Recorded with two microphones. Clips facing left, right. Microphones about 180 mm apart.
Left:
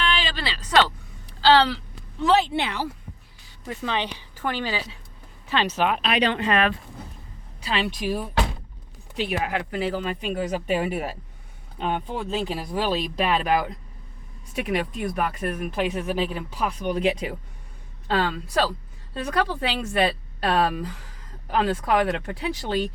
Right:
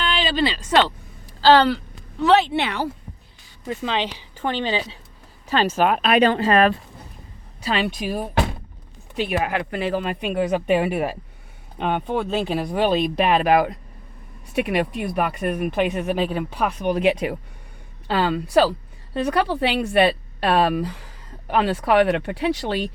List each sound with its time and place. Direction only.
0.1 s speech: 20° right (ahead or behind)
1.4 s speech: 45° right (ahead or behind)
2.2 s speech: 70° right (ahead or behind)
3.7 s speech: 20° right (ahead or behind)
5.5 s speech: 45° right (ahead or behind)
6.3 s speech: 40° right (ahead or behind)
9.1 s speech: 60° right (ahead or behind)